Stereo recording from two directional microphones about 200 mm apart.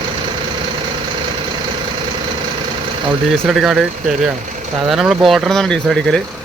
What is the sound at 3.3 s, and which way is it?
Speech, centre (ahead or behind).